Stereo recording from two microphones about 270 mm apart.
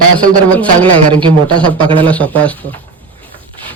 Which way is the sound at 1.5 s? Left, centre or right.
Centre.